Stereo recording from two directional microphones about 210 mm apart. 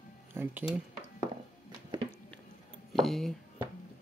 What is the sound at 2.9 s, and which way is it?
Music, centre (ahead or behind).